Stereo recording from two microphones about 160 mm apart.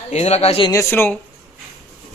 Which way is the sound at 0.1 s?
40° left (ahead or behind).